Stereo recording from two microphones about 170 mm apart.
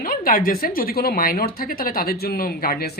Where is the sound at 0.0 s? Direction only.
60° left (ahead or behind).